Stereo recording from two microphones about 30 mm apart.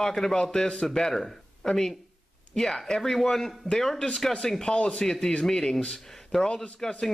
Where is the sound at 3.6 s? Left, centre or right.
Centre.